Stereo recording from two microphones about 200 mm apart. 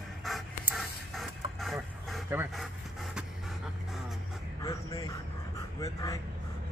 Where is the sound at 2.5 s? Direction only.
Centre (ahead or behind).